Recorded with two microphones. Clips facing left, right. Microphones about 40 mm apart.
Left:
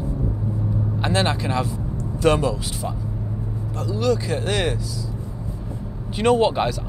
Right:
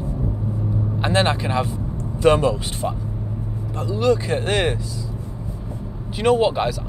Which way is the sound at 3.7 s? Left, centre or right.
Right.